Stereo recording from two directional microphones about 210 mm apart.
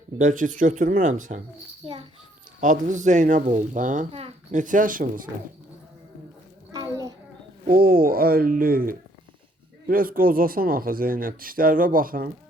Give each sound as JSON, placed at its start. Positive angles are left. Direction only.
{"t": 0.2, "sound": "speech", "side_deg": -40}
{"t": 1.8, "sound": "a child's voice", "side_deg": -25}
{"t": 2.6, "sound": "speech", "side_deg": -40}
{"t": 7.7, "sound": "speech", "side_deg": -45}